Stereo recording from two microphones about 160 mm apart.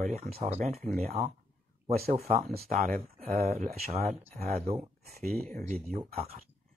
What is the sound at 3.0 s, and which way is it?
Speech, 65° right (ahead or behind).